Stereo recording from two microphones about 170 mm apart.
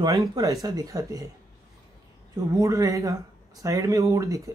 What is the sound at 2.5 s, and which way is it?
Speech, 20° right (ahead or behind).